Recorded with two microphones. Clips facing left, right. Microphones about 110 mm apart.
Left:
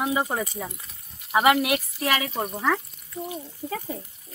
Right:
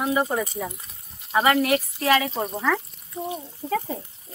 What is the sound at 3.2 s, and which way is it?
Speech, 25° right (ahead or behind).